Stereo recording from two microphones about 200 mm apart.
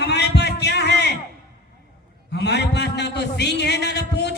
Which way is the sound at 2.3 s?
55° left (ahead or behind).